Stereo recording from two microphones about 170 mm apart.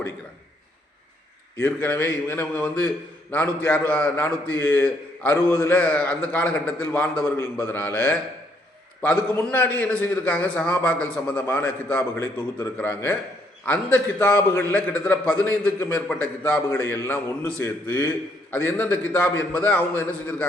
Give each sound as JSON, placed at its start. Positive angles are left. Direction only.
{"t": 1.5, "sound": "a man's voice", "side_deg": 10}